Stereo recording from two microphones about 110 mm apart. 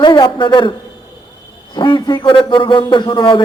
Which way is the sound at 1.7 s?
45° left (ahead or behind).